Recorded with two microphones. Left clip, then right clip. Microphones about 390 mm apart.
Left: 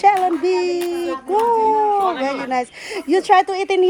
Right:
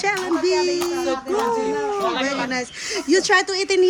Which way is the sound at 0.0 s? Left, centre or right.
Centre.